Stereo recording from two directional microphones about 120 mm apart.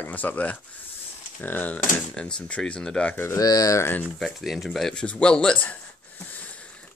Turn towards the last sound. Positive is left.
turn(degrees=10)  # may be behind; listen again after turning